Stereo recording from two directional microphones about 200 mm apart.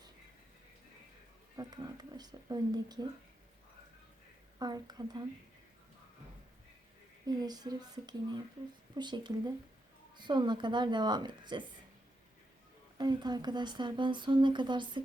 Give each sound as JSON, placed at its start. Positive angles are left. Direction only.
{"t": 1.5, "sound": "speech", "side_deg": -20}
{"t": 4.6, "sound": "speech", "side_deg": -20}
{"t": 7.3, "sound": "speech", "side_deg": -20}
{"t": 13.0, "sound": "speech", "side_deg": -20}